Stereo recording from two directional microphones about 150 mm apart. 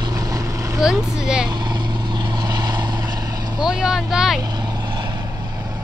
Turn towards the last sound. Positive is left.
turn(degrees=0)  # may be behind; listen again after turning